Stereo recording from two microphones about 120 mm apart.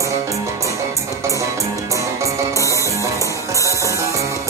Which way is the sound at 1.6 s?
25° right (ahead or behind).